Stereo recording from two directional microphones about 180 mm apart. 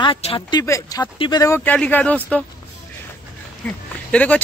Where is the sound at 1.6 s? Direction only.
10° left (ahead or behind).